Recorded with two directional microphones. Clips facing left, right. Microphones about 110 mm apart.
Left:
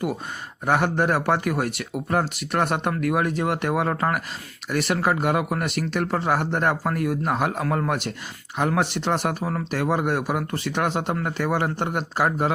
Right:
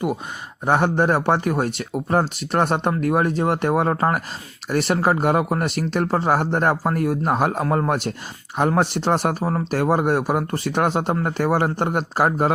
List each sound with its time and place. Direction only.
0.6 s speech: 30° right (ahead or behind)